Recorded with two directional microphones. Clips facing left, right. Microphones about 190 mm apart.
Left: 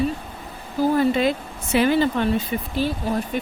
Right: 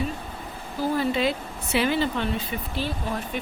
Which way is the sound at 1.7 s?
45° left (ahead or behind).